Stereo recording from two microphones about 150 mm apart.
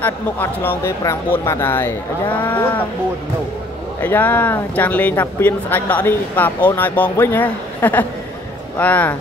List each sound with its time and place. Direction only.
0.0 s speech: 15° left (ahead or behind)
4.0 s speech: 10° left (ahead or behind)